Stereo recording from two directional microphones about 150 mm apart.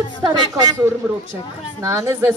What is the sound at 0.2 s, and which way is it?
Speech, 25° right (ahead or behind).